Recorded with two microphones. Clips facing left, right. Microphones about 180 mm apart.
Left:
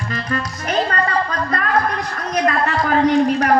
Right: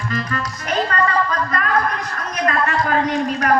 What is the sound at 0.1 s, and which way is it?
A man's voice, 35° left (ahead or behind).